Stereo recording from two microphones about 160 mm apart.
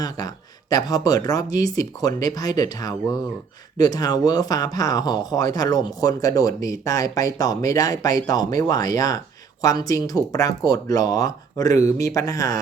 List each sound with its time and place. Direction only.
0.7 s speech: 25° left (ahead or behind)